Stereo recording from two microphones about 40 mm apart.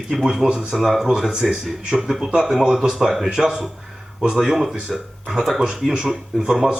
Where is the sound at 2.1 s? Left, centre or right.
Centre.